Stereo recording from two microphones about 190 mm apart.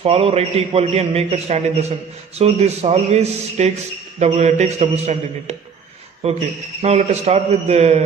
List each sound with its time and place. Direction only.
0.0 s a man's voice: 30° right (ahead or behind)